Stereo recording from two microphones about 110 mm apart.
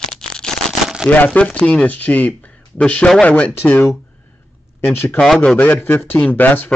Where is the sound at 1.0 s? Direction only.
10° left (ahead or behind).